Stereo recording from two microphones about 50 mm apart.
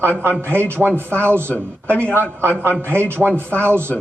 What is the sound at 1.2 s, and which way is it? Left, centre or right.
Speech, right.